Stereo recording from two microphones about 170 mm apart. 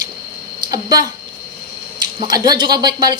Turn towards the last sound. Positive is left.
turn(degrees=-25)  # may be behind; listen again after turning